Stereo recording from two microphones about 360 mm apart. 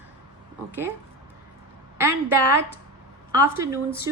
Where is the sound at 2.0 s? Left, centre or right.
Centre.